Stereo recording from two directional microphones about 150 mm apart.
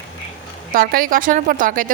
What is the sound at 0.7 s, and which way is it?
Speech, 70° right (ahead or behind).